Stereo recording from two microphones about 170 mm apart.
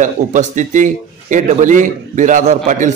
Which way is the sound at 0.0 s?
45° right (ahead or behind).